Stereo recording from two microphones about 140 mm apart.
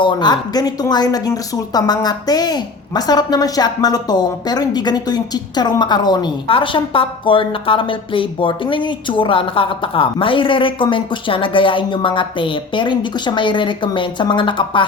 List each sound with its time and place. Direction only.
0.0 s speech: 35° left (ahead or behind)